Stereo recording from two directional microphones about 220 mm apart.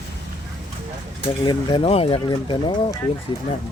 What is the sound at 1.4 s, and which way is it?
Speech, 25° left (ahead or behind).